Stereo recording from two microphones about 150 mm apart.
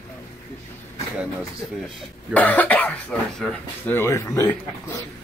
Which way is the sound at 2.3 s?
10° left (ahead or behind).